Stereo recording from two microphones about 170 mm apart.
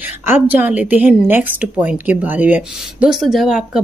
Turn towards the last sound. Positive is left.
turn(degrees=0)  # may be behind; listen again after turning